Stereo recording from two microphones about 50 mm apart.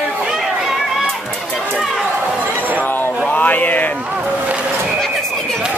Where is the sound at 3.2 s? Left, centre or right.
Left.